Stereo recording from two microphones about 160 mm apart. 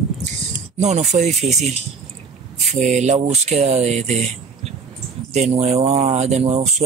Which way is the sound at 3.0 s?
45° right (ahead or behind).